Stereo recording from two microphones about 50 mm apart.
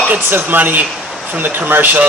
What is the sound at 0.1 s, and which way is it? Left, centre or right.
A man's voice, right.